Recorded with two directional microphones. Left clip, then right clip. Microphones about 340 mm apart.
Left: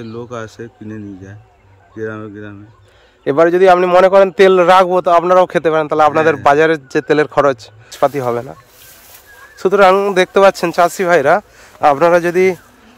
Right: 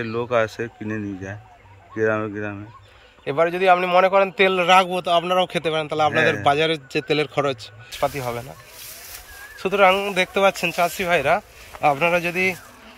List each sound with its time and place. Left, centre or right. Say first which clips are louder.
0.0 s speech: right 5 dB; centre
3.3 s a man's voice: left 8 dB; centre
7.9 s speech: left 9 dB; left
9.7 s a man's voice: left 7 dB; centre